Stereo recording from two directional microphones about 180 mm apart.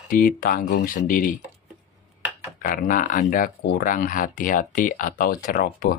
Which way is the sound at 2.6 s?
50° left (ahead or behind).